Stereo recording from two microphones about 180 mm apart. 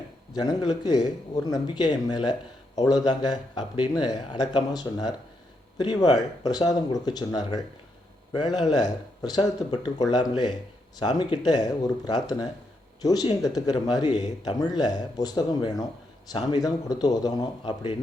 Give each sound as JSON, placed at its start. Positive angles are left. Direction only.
{"t": 0.3, "sound": "speech", "side_deg": 20}